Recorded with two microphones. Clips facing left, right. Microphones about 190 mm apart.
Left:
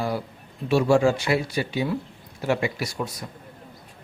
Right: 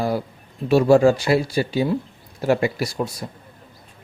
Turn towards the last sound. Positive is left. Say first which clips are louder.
# right 5 dB
turn(degrees=-30)  # may be behind; listen again after turning